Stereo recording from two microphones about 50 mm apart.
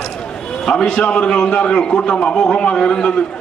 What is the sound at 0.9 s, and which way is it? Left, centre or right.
A man's voice, left.